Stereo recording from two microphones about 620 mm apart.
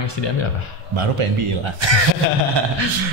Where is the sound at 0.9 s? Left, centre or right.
Right.